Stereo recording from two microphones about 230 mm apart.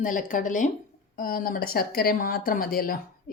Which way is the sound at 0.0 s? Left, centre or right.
Left.